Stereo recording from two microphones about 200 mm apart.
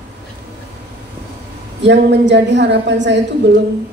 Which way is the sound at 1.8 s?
60° right (ahead or behind).